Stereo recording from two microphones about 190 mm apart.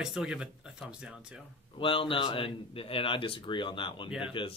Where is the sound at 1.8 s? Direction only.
25° left (ahead or behind).